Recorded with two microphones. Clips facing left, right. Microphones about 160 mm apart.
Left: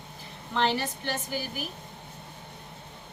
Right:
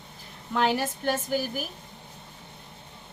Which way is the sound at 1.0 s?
45° right (ahead or behind).